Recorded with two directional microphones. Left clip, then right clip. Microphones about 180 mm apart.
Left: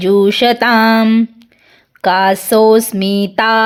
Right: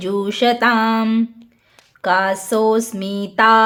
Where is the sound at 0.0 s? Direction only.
30° left (ahead or behind).